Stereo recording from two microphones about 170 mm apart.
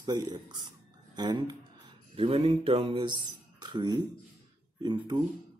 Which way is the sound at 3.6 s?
25° right (ahead or behind).